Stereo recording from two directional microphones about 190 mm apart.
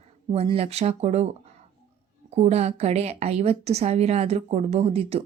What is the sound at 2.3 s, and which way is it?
A woman's voice, 35° right (ahead or behind).